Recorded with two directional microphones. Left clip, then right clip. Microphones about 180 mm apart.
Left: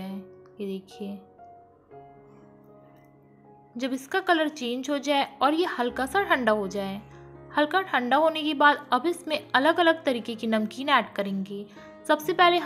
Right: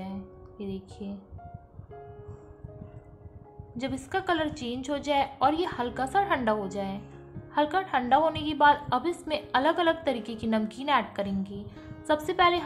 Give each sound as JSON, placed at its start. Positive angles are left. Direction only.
{"t": 0.0, "sound": "music", "side_deg": 20}
{"t": 3.7, "sound": "a woman's voice", "side_deg": 15}